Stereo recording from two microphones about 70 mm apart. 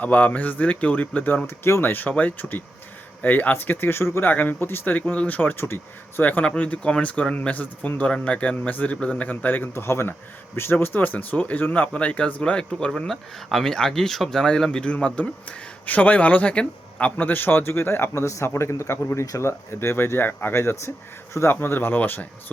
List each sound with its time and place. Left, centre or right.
0.0 s speech: left
9.7 s speech: left
19.5 s speech: left